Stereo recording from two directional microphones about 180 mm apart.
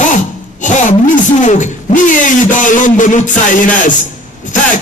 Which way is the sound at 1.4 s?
40° left (ahead or behind).